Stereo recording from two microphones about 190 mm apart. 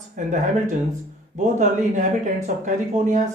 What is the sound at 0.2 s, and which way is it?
Speech, 40° right (ahead or behind).